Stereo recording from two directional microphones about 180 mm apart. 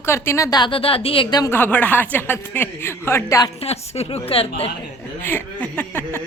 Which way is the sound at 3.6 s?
35° left (ahead or behind).